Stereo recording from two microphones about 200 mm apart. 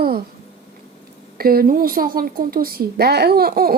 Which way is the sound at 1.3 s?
50° right (ahead or behind).